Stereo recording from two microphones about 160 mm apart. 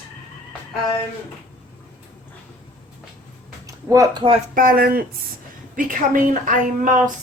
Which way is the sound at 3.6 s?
20° right (ahead or behind).